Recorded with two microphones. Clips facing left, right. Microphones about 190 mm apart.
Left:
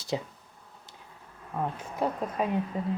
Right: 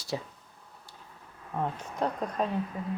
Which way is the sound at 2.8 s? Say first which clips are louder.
Left 4 dB; 25° left (ahead or behind).